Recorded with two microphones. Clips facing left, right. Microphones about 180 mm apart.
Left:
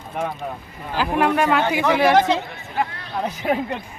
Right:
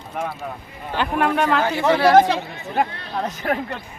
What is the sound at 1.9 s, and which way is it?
Speech, 15° left (ahead or behind).